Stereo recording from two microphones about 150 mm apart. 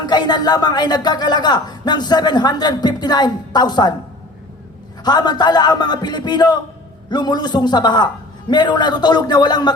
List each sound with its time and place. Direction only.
0.0 s speech: 30° left (ahead or behind)
5.0 s speech: 30° left (ahead or behind)